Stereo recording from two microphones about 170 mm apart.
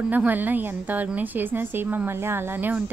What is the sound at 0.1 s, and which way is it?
A woman's voice, 10° right (ahead or behind).